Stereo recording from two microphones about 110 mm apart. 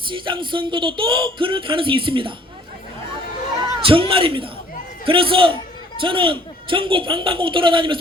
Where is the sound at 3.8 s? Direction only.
55° right (ahead or behind).